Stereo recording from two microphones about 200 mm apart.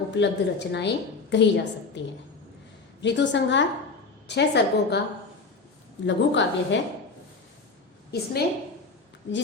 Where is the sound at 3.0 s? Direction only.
60° left (ahead or behind).